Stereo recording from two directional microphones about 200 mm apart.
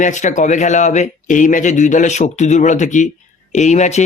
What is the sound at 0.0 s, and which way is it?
Speech, 40° left (ahead or behind).